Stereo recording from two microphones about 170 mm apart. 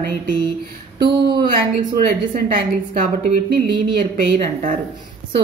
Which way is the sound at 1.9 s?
60° right (ahead or behind).